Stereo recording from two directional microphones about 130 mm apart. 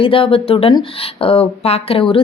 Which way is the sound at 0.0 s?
45° left (ahead or behind).